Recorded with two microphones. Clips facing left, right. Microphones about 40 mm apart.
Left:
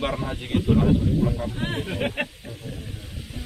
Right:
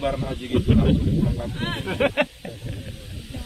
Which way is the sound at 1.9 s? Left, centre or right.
Right.